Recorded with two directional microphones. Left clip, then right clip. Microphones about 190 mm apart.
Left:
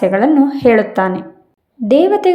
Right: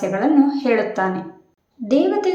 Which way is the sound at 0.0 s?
40° left (ahead or behind).